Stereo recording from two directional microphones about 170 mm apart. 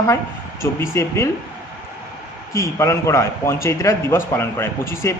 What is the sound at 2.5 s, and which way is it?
A man's voice, 15° left (ahead or behind).